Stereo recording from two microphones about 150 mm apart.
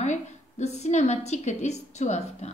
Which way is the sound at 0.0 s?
50° left (ahead or behind).